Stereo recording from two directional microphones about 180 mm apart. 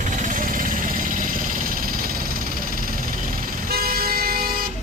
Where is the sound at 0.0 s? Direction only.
45° right (ahead or behind).